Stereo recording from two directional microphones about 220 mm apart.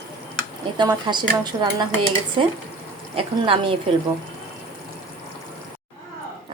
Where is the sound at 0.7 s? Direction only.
20° right (ahead or behind).